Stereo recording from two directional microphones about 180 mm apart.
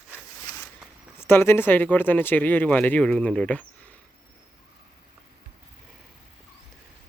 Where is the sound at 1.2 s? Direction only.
10° left (ahead or behind).